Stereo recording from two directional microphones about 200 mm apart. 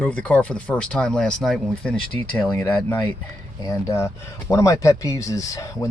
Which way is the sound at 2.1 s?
20° left (ahead or behind).